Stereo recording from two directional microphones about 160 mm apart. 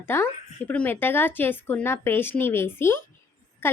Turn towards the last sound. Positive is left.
turn(degrees=15)  # may be behind; listen again after turning